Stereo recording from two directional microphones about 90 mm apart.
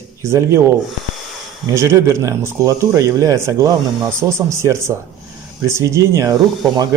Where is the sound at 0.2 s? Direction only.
30° right (ahead or behind).